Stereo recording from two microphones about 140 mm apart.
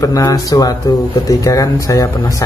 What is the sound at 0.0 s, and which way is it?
Speech, 25° left (ahead or behind).